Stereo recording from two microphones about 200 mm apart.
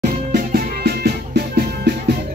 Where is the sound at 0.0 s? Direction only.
45° right (ahead or behind).